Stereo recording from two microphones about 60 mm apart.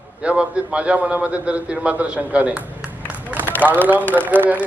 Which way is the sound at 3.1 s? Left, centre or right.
Right.